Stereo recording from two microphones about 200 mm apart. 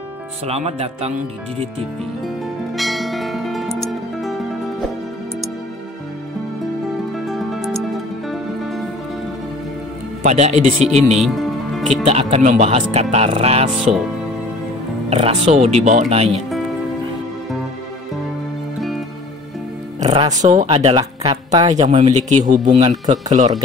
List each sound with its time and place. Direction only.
0.5 s speech: 30° right (ahead or behind)
2.2 s music: centre (ahead or behind)
7.2 s music: centre (ahead or behind)
10.2 s speech: 35° right (ahead or behind)
11.1 s music: centre (ahead or behind)
12.1 s speech: 30° right (ahead or behind)
15.0 s speech: 30° right (ahead or behind)
20.0 s music: 35° right (ahead or behind)
20.3 s speech: 40° right (ahead or behind)
20.7 s speech: 30° right (ahead or behind)